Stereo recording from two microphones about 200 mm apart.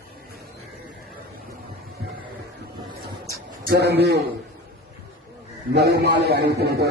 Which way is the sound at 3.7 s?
55° right (ahead or behind).